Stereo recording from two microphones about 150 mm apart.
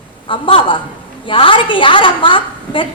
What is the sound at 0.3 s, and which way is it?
A woman's voice, 35° left (ahead or behind).